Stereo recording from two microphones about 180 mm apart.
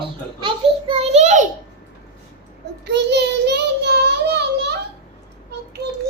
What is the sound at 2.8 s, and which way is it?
Child singing, 70° right (ahead or behind).